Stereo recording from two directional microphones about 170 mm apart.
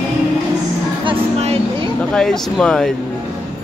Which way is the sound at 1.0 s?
35° right (ahead or behind).